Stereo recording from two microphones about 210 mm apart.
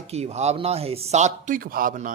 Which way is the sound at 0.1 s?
30° right (ahead or behind).